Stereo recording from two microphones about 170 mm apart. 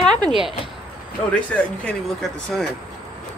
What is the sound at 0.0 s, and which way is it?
Speech, centre (ahead or behind).